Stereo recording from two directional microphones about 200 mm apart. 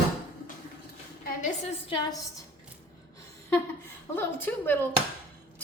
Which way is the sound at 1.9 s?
20° left (ahead or behind).